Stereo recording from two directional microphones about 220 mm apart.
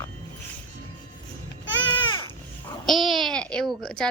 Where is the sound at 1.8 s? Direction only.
20° left (ahead or behind).